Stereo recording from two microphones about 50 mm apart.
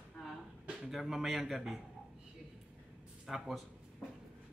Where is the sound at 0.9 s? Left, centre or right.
Centre.